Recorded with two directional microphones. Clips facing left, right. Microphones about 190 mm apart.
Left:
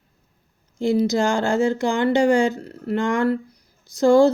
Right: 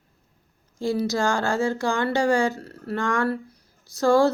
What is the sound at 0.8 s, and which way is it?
Speech, 20° left (ahead or behind).